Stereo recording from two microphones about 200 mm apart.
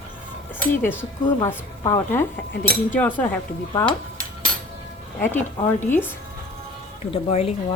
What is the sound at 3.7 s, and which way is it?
Speech, 25° left (ahead or behind).